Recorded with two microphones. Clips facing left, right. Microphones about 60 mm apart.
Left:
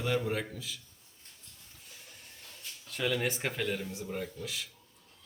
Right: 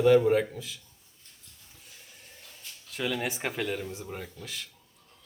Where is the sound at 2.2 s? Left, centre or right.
Centre.